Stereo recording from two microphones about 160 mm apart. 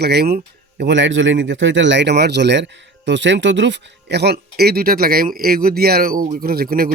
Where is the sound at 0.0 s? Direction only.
90° right.